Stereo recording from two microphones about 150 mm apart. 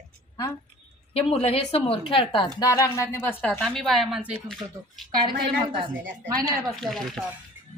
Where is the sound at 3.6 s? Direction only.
Centre (ahead or behind).